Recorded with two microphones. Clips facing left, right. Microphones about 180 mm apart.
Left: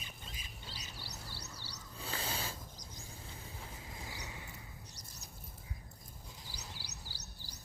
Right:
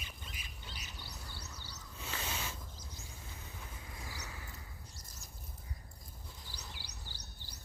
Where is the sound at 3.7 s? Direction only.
25° left (ahead or behind).